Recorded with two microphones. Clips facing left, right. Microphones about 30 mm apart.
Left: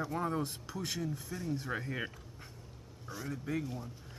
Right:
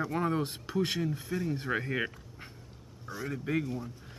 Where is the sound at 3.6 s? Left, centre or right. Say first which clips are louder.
Right 5 dB; centre.